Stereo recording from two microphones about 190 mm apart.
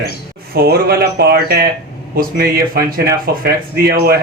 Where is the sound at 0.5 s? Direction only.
55° right (ahead or behind).